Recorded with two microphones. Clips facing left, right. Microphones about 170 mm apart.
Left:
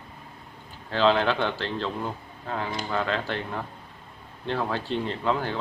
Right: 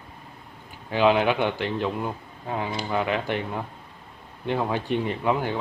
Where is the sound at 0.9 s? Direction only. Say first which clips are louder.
Right 2 dB; 15° right (ahead or behind).